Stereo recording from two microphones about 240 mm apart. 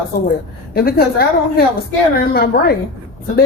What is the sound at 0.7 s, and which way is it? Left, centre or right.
A woman's voice, left.